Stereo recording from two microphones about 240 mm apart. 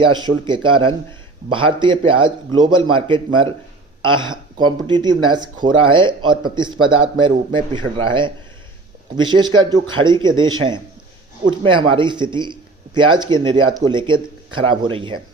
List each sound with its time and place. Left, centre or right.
0.1 s a man's voice: centre